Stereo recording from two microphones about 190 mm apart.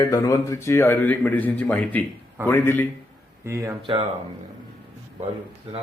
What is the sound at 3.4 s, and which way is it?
Speech, 15° right (ahead or behind).